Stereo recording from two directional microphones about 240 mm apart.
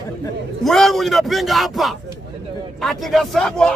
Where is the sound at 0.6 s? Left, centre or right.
Centre.